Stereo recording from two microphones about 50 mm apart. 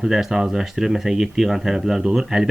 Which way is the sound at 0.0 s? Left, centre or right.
Centre.